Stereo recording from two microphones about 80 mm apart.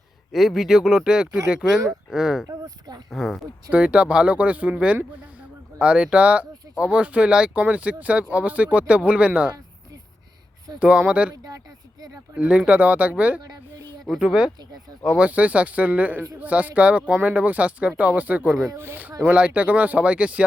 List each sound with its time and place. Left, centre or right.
0.3 s speech: centre
2.5 s speech: right
3.1 s speech: centre
3.7 s speech: centre
10.8 s speech: centre
12.4 s speech: centre